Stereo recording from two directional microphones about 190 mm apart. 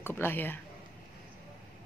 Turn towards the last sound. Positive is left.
turn(degrees=10)  # may be behind; listen again after turning